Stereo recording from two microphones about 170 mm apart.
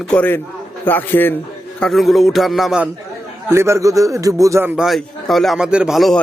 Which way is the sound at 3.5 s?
15° right (ahead or behind).